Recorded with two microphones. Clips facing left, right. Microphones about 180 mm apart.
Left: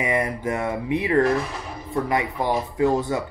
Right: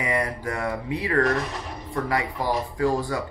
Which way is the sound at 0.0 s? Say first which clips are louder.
Left 3 dB; 20° left (ahead or behind).